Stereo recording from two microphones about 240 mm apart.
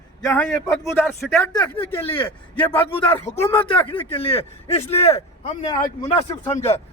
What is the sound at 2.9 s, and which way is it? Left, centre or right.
A man's voice, centre.